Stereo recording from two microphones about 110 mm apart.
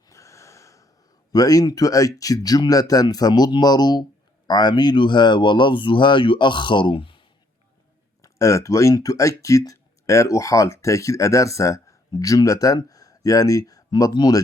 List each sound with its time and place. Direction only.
0.1 s snort: 30° left (ahead or behind)
1.3 s speech: 35° left (ahead or behind); by 7.3 s 55° left (ahead or behind)
8.2 s speech: 30° left (ahead or behind)